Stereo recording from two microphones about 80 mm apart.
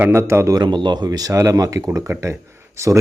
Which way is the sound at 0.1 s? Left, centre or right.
Right.